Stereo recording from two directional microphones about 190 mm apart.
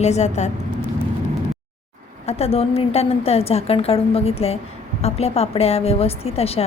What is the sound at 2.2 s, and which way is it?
A woman's voice, 30° left (ahead or behind).